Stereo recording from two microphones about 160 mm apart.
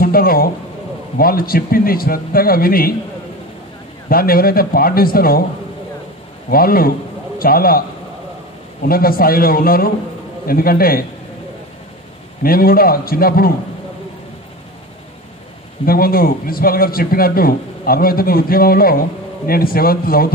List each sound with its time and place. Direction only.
0.0 s a man's voice: 65° left (ahead or behind)
4.1 s a man's voice: 65° left (ahead or behind)
6.5 s a man's voice: 65° left (ahead or behind)
8.8 s a man's voice: 65° left (ahead or behind)
12.4 s a man's voice: 65° left (ahead or behind)
15.8 s a man's voice: 65° left (ahead or behind)